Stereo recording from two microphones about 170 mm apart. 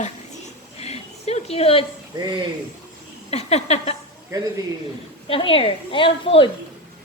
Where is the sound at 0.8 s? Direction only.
40° left (ahead or behind).